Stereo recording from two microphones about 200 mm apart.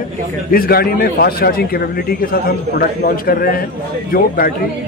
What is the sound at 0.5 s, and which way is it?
A man's voice, 50° left (ahead or behind).